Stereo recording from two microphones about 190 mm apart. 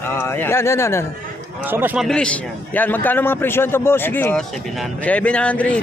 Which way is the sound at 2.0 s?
5° left (ahead or behind).